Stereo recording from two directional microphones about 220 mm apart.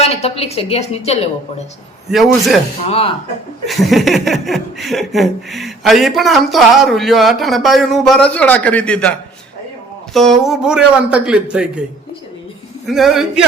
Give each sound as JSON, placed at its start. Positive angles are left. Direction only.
{"t": 0.0, "sound": "a woman's voice", "side_deg": 25}
{"t": 2.0, "sound": "speech", "side_deg": 0}
{"t": 2.8, "sound": "a woman's voice", "side_deg": 25}
{"t": 3.7, "sound": "speech", "side_deg": 0}
{"t": 12.8, "sound": "speech", "side_deg": 0}